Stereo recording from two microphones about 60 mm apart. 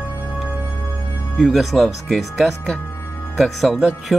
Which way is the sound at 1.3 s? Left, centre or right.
Centre.